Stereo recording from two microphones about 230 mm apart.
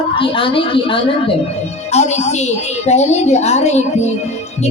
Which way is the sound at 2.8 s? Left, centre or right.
Left.